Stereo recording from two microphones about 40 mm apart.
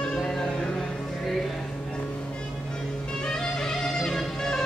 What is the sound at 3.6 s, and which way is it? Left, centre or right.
Music, centre.